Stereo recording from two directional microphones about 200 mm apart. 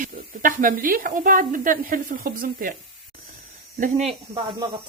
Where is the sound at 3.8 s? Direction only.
30° right (ahead or behind).